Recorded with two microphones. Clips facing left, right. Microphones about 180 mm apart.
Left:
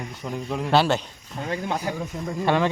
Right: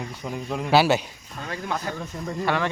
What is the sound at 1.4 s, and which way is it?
Speech, 20° left (ahead or behind).